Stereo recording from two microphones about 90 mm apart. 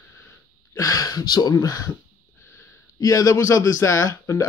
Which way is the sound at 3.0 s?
40° left (ahead or behind).